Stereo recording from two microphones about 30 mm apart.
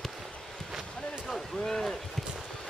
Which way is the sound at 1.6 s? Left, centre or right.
Centre.